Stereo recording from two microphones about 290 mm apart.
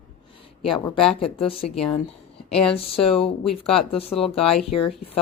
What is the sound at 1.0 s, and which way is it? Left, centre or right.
Speech, centre.